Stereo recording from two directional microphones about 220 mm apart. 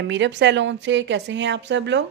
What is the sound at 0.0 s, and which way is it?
A woman's voice, 55° right (ahead or behind).